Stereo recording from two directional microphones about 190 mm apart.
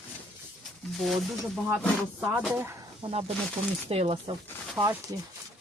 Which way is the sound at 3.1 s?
35° right (ahead or behind).